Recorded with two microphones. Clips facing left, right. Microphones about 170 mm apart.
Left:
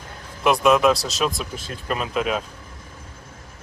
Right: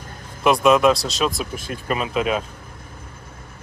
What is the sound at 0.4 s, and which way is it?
Speech, centre (ahead or behind).